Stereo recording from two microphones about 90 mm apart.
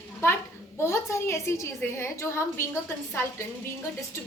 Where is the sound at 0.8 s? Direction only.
30° left (ahead or behind).